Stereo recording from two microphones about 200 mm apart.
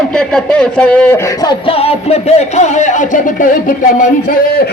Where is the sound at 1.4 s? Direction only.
25° left (ahead or behind).